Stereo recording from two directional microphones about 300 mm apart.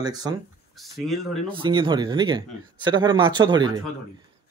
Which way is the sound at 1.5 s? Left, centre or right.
Centre.